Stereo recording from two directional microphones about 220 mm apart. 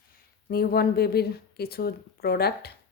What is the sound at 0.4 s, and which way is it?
Speech, 45° left (ahead or behind).